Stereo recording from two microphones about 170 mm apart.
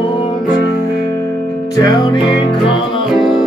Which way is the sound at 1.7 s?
20° left (ahead or behind).